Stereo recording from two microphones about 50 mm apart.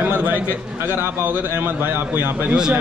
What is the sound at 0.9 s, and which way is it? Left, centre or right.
A man's voice, right.